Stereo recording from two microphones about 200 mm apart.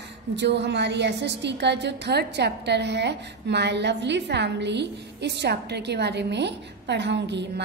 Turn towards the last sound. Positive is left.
turn(degrees=-60)  # may be behind; listen again after turning